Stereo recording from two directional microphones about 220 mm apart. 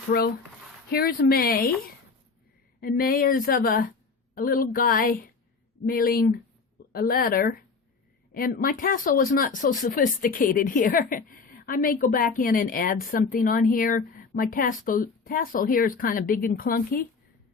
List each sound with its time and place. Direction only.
0.1 s speech: 40° left (ahead or behind)
2.8 s speech: 40° left (ahead or behind)